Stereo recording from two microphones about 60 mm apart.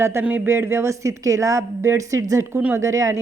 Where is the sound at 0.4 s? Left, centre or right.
Right.